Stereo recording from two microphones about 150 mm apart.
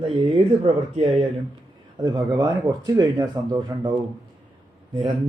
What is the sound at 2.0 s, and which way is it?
Speech, 25° right (ahead or behind).